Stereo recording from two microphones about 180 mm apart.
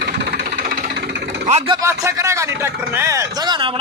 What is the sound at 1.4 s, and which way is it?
Speech, 35° right (ahead or behind).